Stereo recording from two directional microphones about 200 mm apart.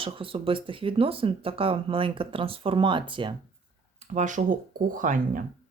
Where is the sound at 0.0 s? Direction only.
25° right (ahead or behind).